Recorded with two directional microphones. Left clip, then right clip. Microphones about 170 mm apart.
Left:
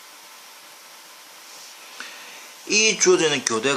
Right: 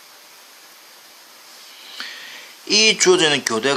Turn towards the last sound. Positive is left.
turn(degrees=-30)  # may be behind; listen again after turning